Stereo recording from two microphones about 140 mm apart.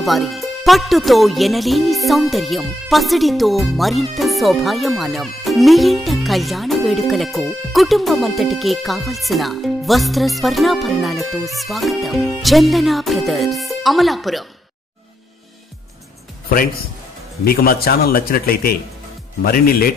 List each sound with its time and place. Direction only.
0.0 s speech: centre (ahead or behind)
17.5 s a man's voice: 90° left